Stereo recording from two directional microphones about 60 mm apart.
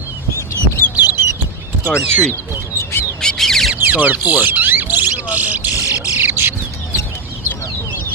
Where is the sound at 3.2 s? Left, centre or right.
Centre.